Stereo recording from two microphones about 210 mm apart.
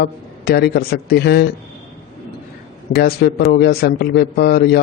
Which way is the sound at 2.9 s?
50° left (ahead or behind).